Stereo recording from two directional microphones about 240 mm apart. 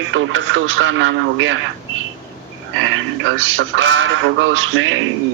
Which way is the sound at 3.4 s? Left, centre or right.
Right.